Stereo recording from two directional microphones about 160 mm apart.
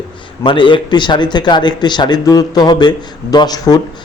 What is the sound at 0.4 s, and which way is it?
Speech, 30° left (ahead or behind).